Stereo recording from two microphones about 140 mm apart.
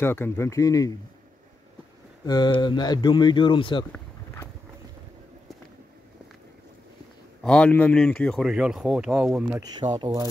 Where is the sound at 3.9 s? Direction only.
20° left (ahead or behind).